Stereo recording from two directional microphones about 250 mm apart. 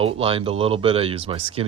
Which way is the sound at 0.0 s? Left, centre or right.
Right.